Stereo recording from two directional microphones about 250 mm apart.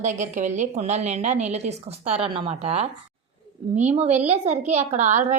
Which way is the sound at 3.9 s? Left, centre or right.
Right.